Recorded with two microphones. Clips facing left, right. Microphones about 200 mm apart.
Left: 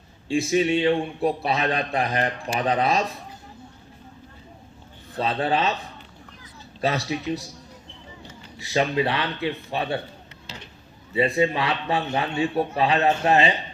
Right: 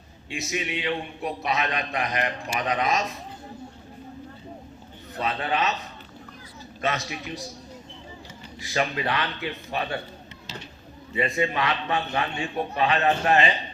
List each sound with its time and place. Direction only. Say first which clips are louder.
0.3 s a man's voice: left 10 dB; 30° left (ahead or behind)
5.1 s a man's voice: left 4 dB; 30° left (ahead or behind)
6.8 s a man's voice: left 4 dB; 35° left (ahead or behind)
8.5 s speech: left 5 dB; 30° left (ahead or behind)
11.1 s a man's voice: left 4 dB; 30° left (ahead or behind)